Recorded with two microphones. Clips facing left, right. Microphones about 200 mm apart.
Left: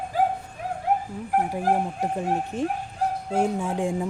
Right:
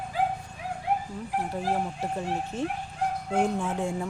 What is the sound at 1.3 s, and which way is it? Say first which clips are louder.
Speech: left 6 dB; 50° left (ahead or behind).